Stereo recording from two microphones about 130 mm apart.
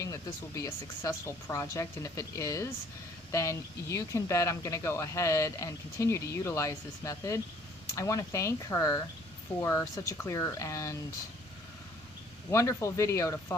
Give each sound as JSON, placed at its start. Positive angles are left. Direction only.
{"t": 0.0, "sound": "speech", "side_deg": 25}
{"t": 12.5, "sound": "speech", "side_deg": 25}